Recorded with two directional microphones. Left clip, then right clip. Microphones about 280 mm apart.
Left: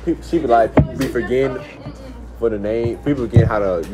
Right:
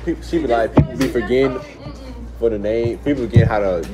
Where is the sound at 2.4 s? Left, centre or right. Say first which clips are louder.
Right 1 dB; centre.